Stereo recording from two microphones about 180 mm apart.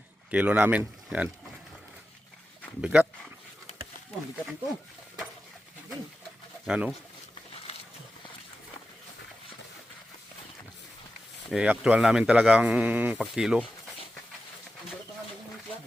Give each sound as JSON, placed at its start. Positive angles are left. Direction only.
{"t": 0.3, "sound": "speech", "side_deg": -5}
{"t": 2.8, "sound": "speech", "side_deg": -10}
{"t": 3.7, "sound": "a sound", "side_deg": 35}
{"t": 6.7, "sound": "speech", "side_deg": -5}
{"t": 11.5, "sound": "speech", "side_deg": -5}